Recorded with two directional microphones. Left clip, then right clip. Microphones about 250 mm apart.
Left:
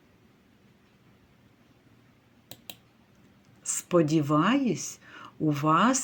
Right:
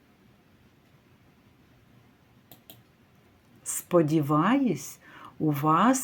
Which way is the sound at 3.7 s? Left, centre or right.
Centre.